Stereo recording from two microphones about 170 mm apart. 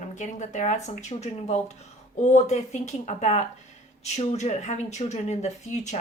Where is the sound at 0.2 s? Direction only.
45° left (ahead or behind).